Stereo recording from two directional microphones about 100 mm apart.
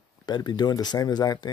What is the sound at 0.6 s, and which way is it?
Speech, 40° left (ahead or behind).